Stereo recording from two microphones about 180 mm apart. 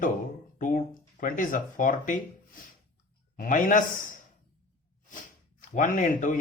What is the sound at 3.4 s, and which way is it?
Speech, 45° left (ahead or behind).